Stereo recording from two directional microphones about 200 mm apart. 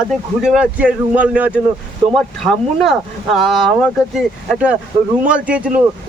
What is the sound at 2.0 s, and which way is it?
Speech, 25° right (ahead or behind).